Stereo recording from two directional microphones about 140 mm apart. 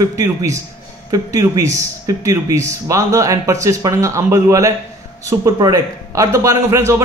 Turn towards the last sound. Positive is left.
turn(degrees=-20)  # may be behind; listen again after turning